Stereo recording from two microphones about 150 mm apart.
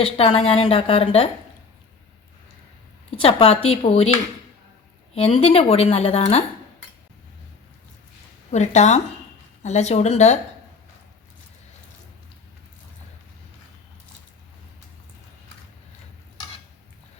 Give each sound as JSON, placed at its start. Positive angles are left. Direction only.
{"t": 0.0, "sound": "a woman's voice", "side_deg": 40}
{"t": 3.2, "sound": "a woman's voice", "side_deg": 40}
{"t": 5.1, "sound": "a woman's voice", "side_deg": 40}
{"t": 8.4, "sound": "a woman's voice", "side_deg": 50}